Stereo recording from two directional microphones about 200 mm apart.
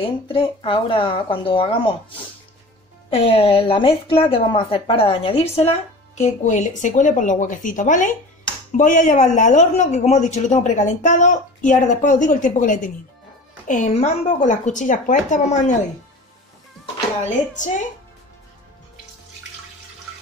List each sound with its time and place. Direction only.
0.0 s speech: 25° left (ahead or behind)